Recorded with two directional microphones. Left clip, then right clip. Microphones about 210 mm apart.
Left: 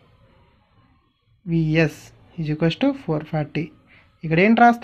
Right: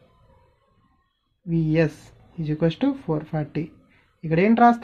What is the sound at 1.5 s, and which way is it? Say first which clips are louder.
Speech: left 2 dB; 10° left (ahead or behind).